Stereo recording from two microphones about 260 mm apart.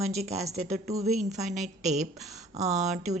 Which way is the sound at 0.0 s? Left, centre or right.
Right.